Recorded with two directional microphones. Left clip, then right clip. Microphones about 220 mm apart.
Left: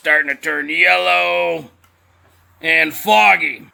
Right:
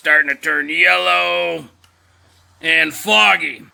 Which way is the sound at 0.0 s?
5° left (ahead or behind).